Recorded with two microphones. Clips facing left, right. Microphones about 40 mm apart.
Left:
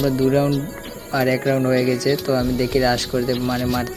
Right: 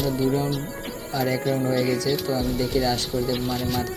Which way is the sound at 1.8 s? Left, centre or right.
Centre.